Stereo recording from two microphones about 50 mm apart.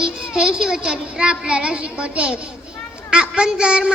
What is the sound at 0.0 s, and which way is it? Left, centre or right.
Speech, centre.